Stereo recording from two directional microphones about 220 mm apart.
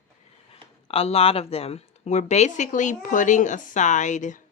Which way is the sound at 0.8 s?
25° left (ahead or behind).